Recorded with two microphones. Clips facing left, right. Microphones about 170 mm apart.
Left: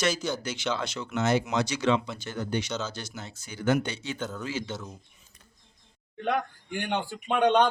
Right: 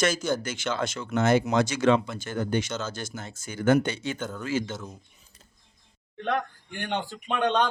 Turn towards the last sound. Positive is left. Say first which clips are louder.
# left 3 dB
turn(degrees=15)  # may be behind; listen again after turning